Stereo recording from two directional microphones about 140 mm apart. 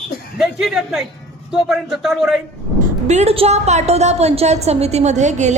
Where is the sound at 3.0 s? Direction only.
50° right (ahead or behind).